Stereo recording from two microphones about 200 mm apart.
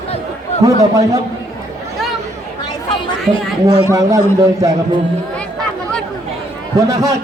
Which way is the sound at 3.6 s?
15° right (ahead or behind).